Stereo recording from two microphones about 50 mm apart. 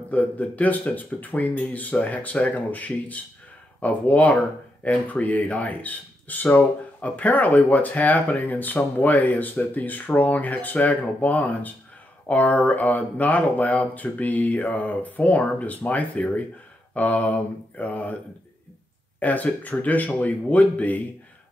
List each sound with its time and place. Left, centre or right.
0.1 s speech: left
19.1 s speech: left